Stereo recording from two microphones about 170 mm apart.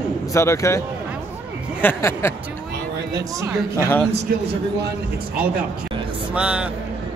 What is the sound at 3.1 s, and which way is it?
Speech, 20° right (ahead or behind).